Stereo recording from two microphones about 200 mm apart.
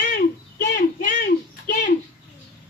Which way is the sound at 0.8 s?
45° left (ahead or behind).